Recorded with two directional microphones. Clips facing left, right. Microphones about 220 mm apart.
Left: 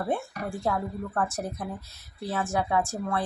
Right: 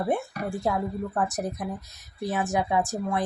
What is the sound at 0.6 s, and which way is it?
Speech, 15° right (ahead or behind).